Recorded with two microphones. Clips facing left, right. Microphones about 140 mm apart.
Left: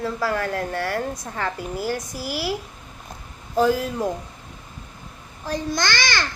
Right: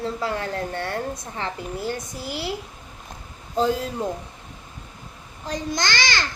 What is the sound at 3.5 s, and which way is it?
Speech, 25° right (ahead or behind).